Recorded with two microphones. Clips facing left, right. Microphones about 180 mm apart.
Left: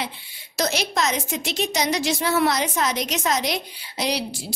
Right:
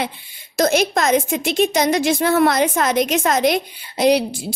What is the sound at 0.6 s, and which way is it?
A woman's voice, 50° right (ahead or behind).